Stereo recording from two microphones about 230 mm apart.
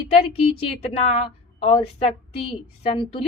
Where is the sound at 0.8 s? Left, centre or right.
Left.